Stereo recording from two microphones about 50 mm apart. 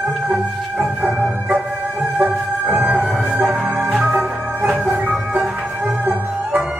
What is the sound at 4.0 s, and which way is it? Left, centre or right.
Music, centre.